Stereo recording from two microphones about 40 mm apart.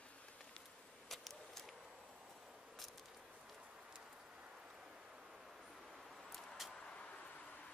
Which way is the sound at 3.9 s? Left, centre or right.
Right.